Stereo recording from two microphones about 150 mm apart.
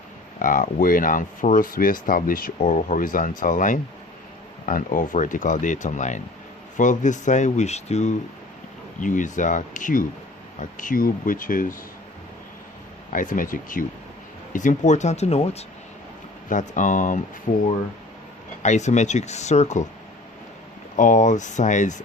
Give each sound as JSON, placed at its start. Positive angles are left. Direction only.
{"t": 0.3, "sound": "speech", "side_deg": 60}
{"t": 9.0, "sound": "speech", "side_deg": 60}
{"t": 13.1, "sound": "speech", "side_deg": 65}
{"t": 16.5, "sound": "speech", "side_deg": 55}
{"t": 20.9, "sound": "speech", "side_deg": 55}